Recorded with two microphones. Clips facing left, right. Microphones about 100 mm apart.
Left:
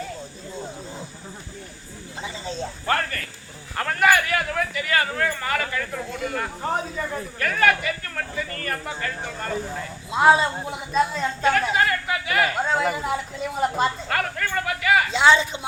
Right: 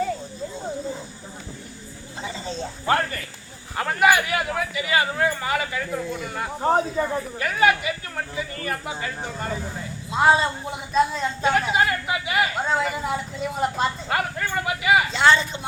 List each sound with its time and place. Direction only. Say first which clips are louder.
2.2 s snake: even; 15° left (ahead or behind)
2.8 s a man's voice: right 3 dB; 20° right (ahead or behind)
6.6 s speech: right 9 dB; 35° right (ahead or behind)
7.3 s speech: even; 15° right (ahead or behind)
10.1 s speech: left 1 dB; 5° left (ahead or behind)
11.4 s speech: even; 15° right (ahead or behind)
12.6 s speech: left 1 dB; centre (ahead or behind)
14.1 s a sound: even; 15° right (ahead or behind)
15.1 s speech: left 1 dB; 10° left (ahead or behind)